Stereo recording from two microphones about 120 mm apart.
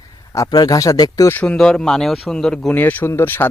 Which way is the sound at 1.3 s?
10° left (ahead or behind).